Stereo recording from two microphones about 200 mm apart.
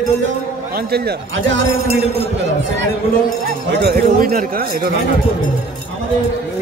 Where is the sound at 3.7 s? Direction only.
50° right (ahead or behind).